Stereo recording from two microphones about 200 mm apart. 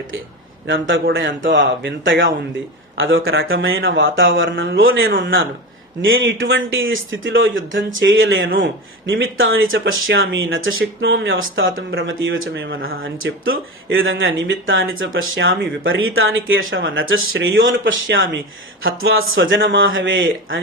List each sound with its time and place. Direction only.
0.7 s speech: 70° right (ahead or behind)
3.0 s speech: 80° right
11.1 s speech: 60° right (ahead or behind)
18.9 s speech: 90° right; by 20.6 s 75° right (ahead or behind)